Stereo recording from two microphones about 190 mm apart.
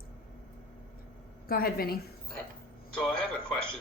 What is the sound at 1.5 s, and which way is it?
Speech, 50° left (ahead or behind).